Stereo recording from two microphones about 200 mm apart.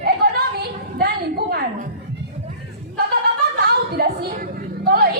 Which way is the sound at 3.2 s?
50° right (ahead or behind).